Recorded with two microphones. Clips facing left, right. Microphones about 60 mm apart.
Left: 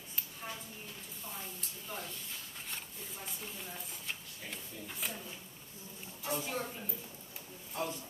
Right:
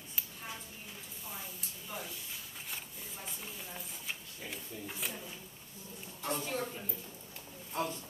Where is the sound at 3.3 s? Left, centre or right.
Centre.